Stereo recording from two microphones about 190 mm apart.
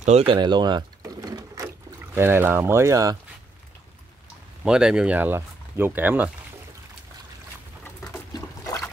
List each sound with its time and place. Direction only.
0.3 s a sound: 25° right (ahead or behind)
2.1 s speech: 10° right (ahead or behind)
4.6 s speech: 5° right (ahead or behind)
8.3 s liquid: 20° left (ahead or behind)